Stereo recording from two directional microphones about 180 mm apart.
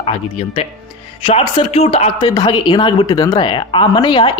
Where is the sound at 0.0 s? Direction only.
30° left (ahead or behind).